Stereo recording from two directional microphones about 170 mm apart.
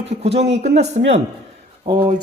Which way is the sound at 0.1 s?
40° right (ahead or behind).